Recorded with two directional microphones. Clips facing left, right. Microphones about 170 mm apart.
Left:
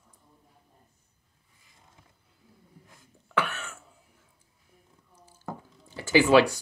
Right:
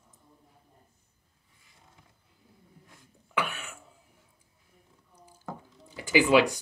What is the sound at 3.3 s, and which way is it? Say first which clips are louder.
Cough: left 2 dB; 10° right (ahead or behind).